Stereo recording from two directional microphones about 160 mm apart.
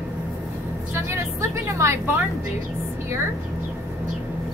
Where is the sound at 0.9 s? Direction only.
15° right (ahead or behind).